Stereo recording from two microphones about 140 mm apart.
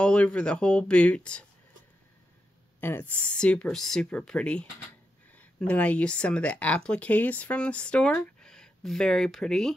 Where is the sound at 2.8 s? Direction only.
15° left (ahead or behind).